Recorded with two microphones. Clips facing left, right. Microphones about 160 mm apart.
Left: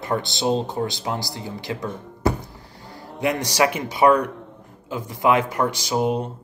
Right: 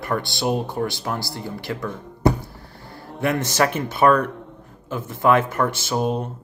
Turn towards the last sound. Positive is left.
turn(degrees=15)  # may be behind; listen again after turning